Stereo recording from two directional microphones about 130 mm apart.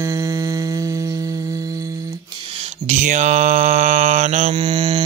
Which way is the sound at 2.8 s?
70° right (ahead or behind).